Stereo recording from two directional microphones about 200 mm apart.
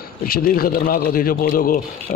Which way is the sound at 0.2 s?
45° left (ahead or behind).